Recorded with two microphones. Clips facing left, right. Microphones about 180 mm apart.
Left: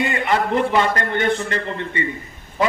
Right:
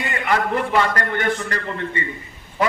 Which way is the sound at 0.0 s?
25° left (ahead or behind).